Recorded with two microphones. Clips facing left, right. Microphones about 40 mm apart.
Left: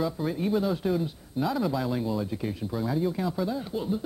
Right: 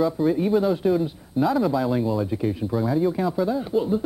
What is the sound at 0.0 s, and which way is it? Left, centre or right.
Speech, centre.